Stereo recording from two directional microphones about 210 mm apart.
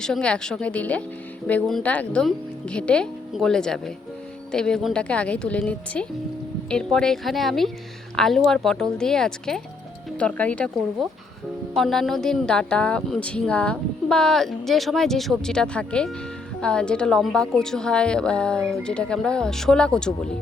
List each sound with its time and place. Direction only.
0.0 s speech: 5° left (ahead or behind)